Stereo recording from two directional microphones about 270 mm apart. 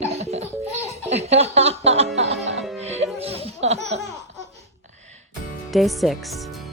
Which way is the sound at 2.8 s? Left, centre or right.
Right.